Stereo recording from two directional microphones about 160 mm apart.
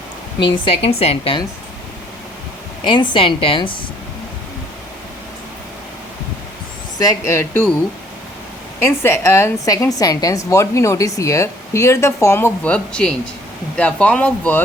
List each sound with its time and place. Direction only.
0.6 s a woman's voice: 35° left (ahead or behind)
2.8 s a woman's voice: 30° left (ahead or behind)
7.0 s a woman's voice: 20° left (ahead or behind)
8.8 s a woman's voice: 15° left (ahead or behind)